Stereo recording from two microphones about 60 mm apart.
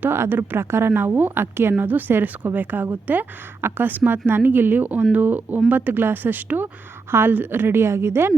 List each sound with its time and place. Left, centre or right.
0.0 s a woman's voice: right